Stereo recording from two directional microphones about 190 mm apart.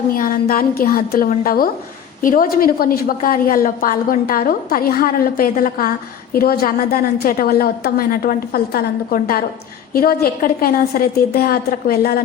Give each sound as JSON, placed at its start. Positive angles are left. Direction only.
{"t": 0.2, "sound": "a woman's voice", "side_deg": 45}